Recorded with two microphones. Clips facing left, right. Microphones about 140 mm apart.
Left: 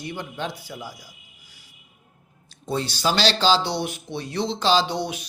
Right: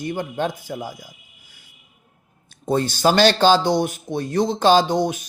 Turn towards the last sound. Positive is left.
turn(degrees=-45)  # may be behind; listen again after turning